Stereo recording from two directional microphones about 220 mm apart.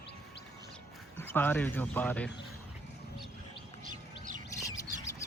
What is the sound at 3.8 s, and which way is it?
Chirp, 35° right (ahead or behind).